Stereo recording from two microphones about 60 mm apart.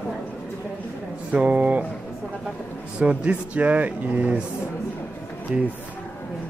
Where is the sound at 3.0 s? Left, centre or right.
Centre.